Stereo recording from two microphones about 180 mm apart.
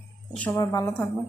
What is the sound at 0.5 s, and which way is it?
Speech, 20° left (ahead or behind).